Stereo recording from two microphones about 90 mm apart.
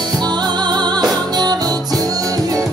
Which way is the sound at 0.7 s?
50° right (ahead or behind).